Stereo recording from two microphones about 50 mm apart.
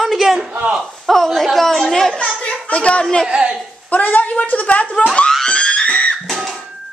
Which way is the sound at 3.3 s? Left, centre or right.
Right.